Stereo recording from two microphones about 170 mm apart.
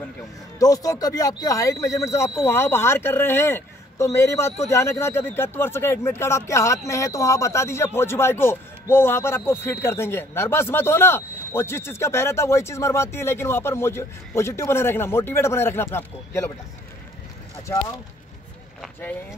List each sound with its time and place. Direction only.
0.6 s speech: 20° left (ahead or behind)
18.8 s speech: 10° left (ahead or behind)